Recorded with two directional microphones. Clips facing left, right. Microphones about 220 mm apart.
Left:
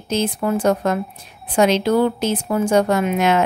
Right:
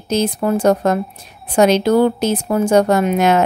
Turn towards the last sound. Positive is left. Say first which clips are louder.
# right 3 dB
turn(degrees=-40)  # may be behind; listen again after turning